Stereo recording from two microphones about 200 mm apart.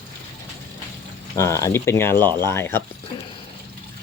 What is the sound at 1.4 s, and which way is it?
Speech, 15° left (ahead or behind).